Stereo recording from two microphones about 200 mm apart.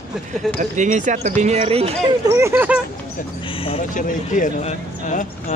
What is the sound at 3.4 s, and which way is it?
Speech, 25° left (ahead or behind).